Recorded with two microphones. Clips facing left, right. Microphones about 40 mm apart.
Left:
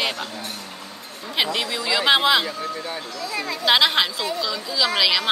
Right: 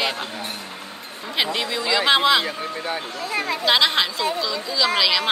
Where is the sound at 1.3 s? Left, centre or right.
Centre.